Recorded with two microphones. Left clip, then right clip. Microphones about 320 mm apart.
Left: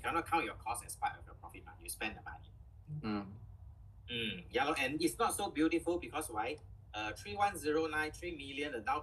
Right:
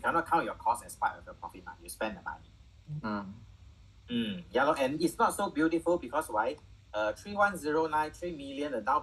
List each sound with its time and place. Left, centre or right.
0.0 s speech: centre